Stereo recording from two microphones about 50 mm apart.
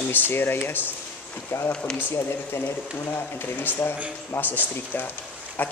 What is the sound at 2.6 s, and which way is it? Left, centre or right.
A man's voice, left.